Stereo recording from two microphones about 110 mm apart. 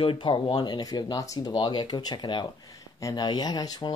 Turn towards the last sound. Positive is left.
turn(degrees=35)  # may be behind; listen again after turning